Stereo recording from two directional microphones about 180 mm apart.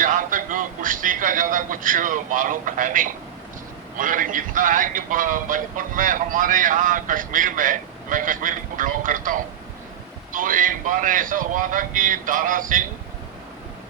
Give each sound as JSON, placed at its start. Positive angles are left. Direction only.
{"t": 0.0, "sound": "a man's voice", "side_deg": -50}